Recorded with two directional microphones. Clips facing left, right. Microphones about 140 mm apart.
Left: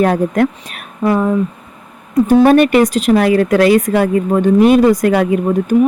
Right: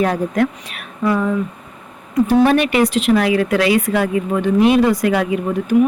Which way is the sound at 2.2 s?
45° left (ahead or behind).